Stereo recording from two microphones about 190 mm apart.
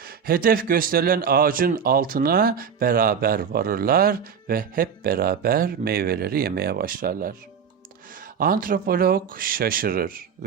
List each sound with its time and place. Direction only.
0.0 s speech: 50° right (ahead or behind)
8.4 s speech: 50° right (ahead or behind)